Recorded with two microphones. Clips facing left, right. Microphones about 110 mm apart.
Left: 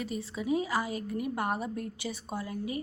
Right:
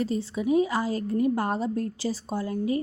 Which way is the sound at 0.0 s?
35° right (ahead or behind).